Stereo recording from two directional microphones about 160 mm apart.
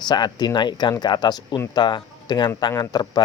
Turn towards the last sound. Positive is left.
turn(degrees=25)  # may be behind; listen again after turning